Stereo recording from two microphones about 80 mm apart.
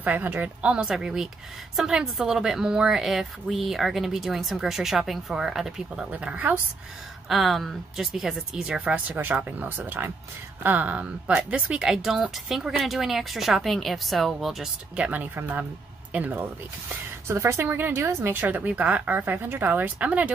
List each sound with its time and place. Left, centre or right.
0.0 s a woman's voice: right; by 6.0 s centre
6.1 s speech: centre
7.2 s a woman's voice: centre
15.0 s speech: right
16.9 s speech: right
18.4 s speech: centre